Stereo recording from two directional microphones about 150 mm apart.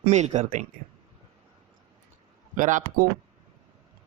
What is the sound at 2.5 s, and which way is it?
Speech, 60° right (ahead or behind).